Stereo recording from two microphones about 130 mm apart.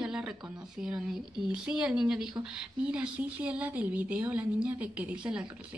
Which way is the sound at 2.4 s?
5° right (ahead or behind).